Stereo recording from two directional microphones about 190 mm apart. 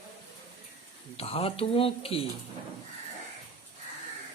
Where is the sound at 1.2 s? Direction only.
30° left (ahead or behind).